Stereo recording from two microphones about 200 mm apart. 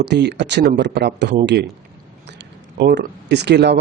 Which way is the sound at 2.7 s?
60° right (ahead or behind).